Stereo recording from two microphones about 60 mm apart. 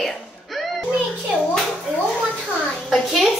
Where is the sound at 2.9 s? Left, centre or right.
Centre.